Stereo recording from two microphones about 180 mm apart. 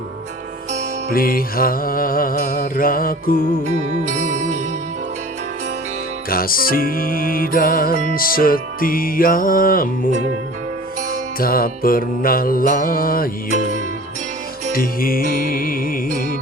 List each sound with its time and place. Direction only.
1.1 s music: 55° left (ahead or behind)
3.7 s music: 45° right (ahead or behind)
6.3 s music: 55° left (ahead or behind)
11.3 s music: 55° left (ahead or behind)
14.7 s music: 55° left (ahead or behind)